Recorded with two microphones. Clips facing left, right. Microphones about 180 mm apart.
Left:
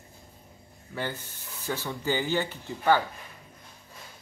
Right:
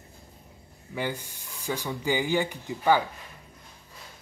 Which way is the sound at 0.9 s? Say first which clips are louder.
Right 2 dB; 15° right (ahead or behind).